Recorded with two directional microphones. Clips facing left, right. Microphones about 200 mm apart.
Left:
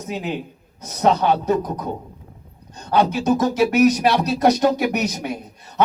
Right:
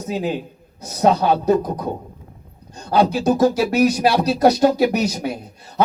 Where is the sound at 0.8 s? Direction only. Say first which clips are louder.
Right 1 dB; 35° right (ahead or behind).